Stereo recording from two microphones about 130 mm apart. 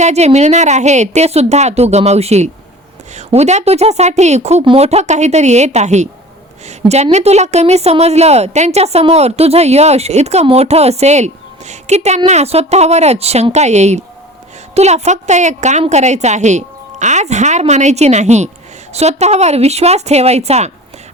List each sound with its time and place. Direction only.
0.0 s a woman's voice: 55° right (ahead or behind)